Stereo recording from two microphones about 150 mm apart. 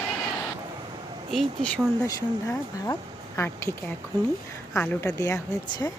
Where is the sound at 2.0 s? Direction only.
20° left (ahead or behind).